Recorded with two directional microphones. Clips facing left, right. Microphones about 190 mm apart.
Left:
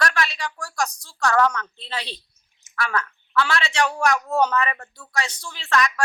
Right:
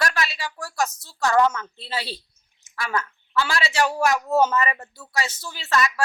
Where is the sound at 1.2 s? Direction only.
20° right (ahead or behind).